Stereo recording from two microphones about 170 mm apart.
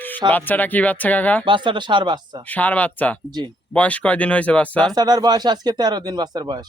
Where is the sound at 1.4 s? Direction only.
30° right (ahead or behind).